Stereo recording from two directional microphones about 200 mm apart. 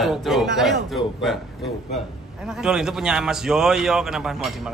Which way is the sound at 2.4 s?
5° right (ahead or behind).